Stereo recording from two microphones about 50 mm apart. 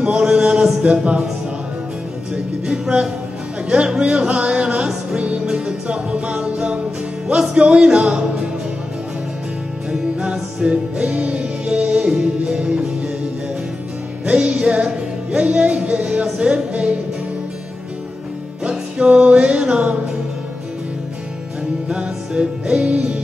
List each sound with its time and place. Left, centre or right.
0.0 s chant: centre
1.0 s a man's voice: centre
2.3 s music: centre
3.6 s speech: centre
5.1 s music: centre
7.5 s speech: right
9.8 s music: centre
14.2 s music: right
15.3 s speech: right
16.3 s music: right
18.6 s music: right
21.8 s music: centre